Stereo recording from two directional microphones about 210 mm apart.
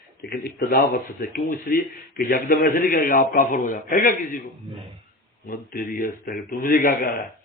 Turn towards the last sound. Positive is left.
turn(degrees=40)  # may be behind; listen again after turning